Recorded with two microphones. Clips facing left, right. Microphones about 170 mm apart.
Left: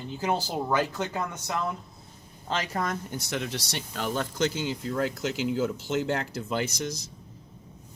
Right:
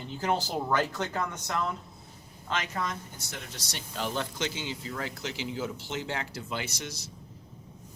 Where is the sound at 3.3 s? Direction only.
80° left.